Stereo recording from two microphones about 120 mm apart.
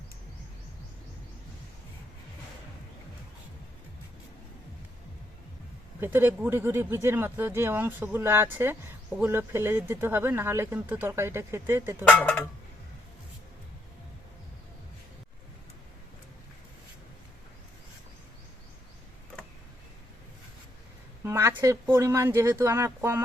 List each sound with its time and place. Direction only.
6.0 s speech: 15° right (ahead or behind)
12.0 s speech: 10° left (ahead or behind)
21.2 s speech: 20° right (ahead or behind)